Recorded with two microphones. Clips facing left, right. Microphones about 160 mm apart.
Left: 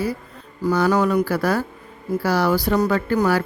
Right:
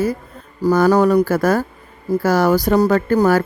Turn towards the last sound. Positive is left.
turn(degrees=-45)  # may be behind; listen again after turning